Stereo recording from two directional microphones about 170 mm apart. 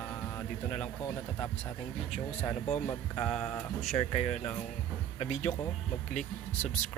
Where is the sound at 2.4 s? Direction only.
10° left (ahead or behind).